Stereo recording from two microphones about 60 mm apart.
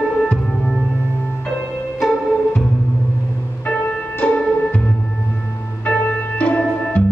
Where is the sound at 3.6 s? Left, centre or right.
Left.